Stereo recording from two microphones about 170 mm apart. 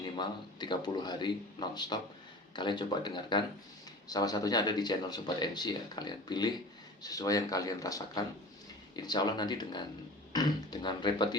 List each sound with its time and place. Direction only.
0.0 s speech: 25° left (ahead or behind)